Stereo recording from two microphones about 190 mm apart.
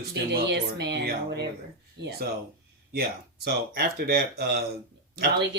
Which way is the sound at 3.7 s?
55° right (ahead or behind).